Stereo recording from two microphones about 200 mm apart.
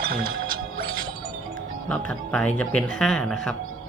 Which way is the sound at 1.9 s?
5° left (ahead or behind).